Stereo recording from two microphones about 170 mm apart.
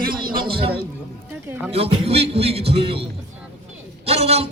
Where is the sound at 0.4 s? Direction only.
30° right (ahead or behind).